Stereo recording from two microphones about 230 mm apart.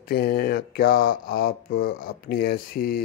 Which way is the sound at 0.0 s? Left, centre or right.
Left.